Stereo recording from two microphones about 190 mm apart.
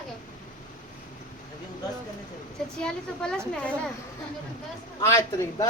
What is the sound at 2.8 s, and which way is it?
Speech, 5° left (ahead or behind).